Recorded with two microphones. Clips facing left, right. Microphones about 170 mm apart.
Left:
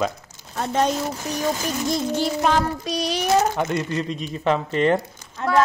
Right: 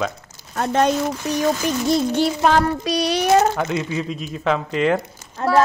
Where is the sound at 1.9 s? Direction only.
65° right (ahead or behind).